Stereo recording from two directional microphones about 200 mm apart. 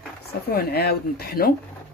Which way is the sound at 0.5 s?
50° left (ahead or behind).